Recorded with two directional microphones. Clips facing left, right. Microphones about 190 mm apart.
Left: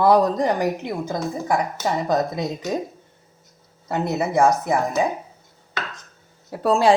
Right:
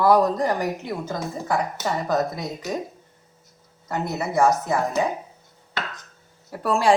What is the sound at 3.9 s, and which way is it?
Speech, 20° left (ahead or behind).